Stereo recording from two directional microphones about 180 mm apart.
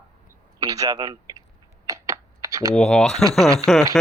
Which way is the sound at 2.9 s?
Centre (ahead or behind).